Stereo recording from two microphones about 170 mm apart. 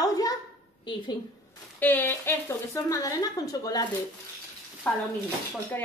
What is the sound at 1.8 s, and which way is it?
Speech, 10° left (ahead or behind).